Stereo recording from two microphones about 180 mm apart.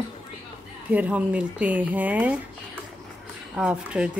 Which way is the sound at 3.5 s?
5° right (ahead or behind).